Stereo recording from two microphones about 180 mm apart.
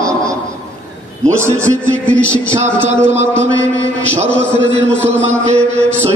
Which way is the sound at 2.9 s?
40° right (ahead or behind).